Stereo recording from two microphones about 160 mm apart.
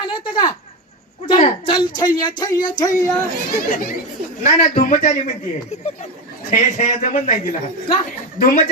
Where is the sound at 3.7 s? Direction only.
60° left (ahead or behind).